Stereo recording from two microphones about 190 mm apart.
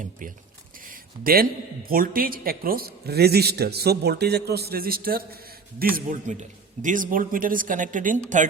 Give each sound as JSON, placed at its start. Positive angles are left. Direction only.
{"t": 0.0, "sound": "speech", "side_deg": -45}
{"t": 0.9, "sound": "a sound", "side_deg": -50}
{"t": 1.9, "sound": "a man's voice", "side_deg": -50}